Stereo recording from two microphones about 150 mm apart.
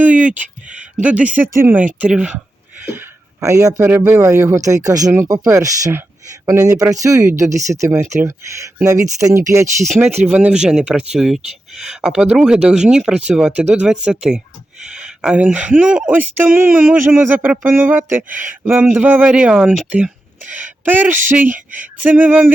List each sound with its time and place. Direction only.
0.0 s speech: 10° right (ahead or behind)
2.8 s a sound: 15° right (ahead or behind)
3.8 s speech: 10° right (ahead or behind)
10.2 s speech: 10° right (ahead or behind)
20.8 s speech: 15° right (ahead or behind)